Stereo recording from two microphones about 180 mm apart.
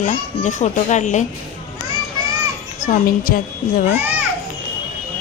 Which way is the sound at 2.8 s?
50° left (ahead or behind).